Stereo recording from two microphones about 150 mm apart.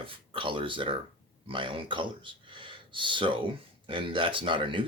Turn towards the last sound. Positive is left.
turn(degrees=-35)  # may be behind; listen again after turning